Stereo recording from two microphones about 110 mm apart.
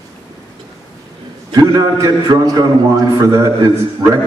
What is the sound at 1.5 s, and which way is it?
A man's voice, 35° right (ahead or behind).